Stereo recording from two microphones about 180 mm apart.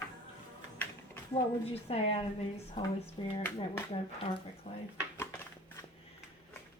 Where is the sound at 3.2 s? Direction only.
30° left (ahead or behind).